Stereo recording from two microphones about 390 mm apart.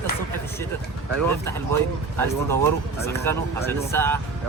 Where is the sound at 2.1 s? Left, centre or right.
Centre.